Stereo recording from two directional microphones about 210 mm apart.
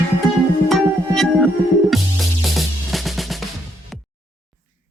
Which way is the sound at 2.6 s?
Centre (ahead or behind).